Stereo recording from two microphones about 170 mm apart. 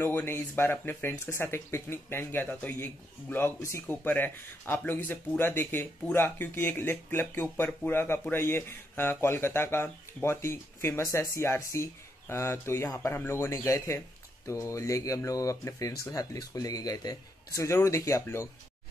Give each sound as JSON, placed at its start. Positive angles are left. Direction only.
{"t": 0.0, "sound": "speech", "side_deg": 15}